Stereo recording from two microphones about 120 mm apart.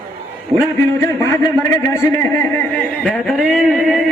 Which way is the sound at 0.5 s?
20° left (ahead or behind).